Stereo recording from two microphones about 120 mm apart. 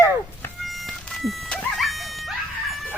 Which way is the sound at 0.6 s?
Centre (ahead or behind).